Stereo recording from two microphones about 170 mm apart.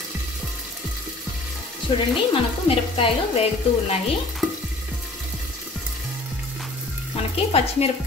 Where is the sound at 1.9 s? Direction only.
30° left (ahead or behind).